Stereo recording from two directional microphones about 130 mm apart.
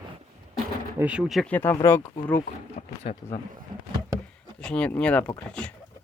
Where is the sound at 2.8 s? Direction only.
90° left.